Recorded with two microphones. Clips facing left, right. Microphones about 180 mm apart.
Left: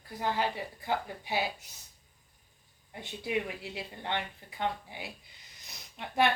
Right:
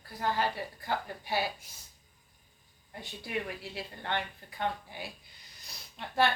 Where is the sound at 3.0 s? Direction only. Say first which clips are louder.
Left 4 dB; 15° left (ahead or behind).